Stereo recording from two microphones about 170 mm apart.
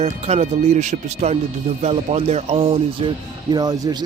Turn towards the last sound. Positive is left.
turn(degrees=-25)  # may be behind; listen again after turning